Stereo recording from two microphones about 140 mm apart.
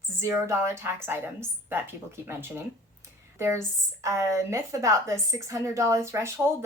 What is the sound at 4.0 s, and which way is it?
Speech, 20° right (ahead or behind).